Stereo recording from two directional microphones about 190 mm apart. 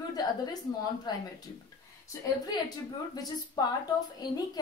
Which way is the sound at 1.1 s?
20° left (ahead or behind).